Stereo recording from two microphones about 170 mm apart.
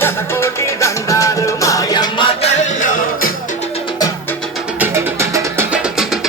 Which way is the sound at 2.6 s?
50° left (ahead or behind).